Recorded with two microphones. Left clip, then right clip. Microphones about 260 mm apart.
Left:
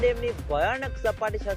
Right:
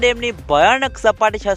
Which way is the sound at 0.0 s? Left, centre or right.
Right.